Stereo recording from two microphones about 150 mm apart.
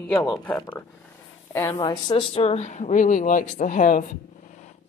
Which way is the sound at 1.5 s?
20° left (ahead or behind).